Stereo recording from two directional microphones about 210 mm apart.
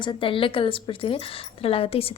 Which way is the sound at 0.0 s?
25° left (ahead or behind).